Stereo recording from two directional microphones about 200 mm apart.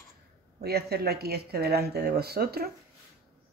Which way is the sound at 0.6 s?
50° right (ahead or behind).